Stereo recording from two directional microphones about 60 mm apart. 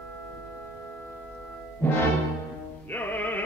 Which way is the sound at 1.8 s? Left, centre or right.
Left.